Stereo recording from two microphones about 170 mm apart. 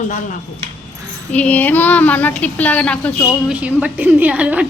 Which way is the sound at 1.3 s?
10° left (ahead or behind).